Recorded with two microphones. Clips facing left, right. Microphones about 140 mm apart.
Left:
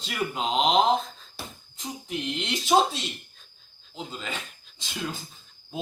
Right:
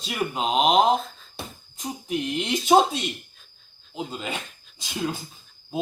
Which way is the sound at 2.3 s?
15° right (ahead or behind).